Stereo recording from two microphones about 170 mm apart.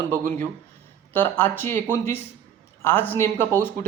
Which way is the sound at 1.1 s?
10° left (ahead or behind).